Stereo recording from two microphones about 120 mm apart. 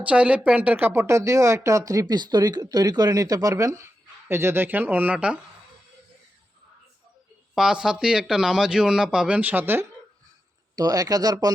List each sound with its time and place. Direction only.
0.0 s speech: 10° right (ahead or behind)
7.5 s speech: 5° right (ahead or behind)
10.8 s speech: 30° right (ahead or behind)